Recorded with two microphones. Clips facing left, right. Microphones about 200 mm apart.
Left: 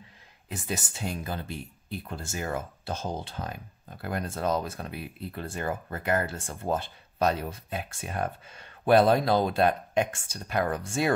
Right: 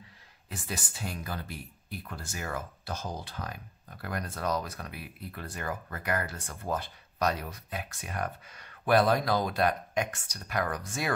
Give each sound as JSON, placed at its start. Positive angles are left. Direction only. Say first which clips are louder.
{"t": 0.5, "sound": "speech", "louder": "left 5 dB", "side_deg": 20}